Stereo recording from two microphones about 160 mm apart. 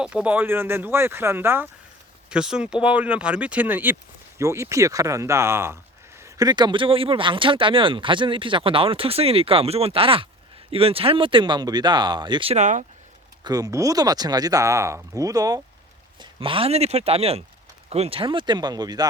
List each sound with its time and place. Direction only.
0.0 s speech: 5° right (ahead or behind); by 12.5 s 30° right (ahead or behind)
12.5 s speech: 50° right (ahead or behind)
13.4 s speech: 25° right (ahead or behind)